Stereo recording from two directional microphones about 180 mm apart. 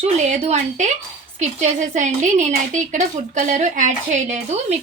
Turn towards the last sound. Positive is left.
turn(degrees=-40)  # may be behind; listen again after turning